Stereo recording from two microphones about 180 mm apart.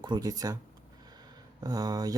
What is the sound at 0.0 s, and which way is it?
Speech, 20° right (ahead or behind).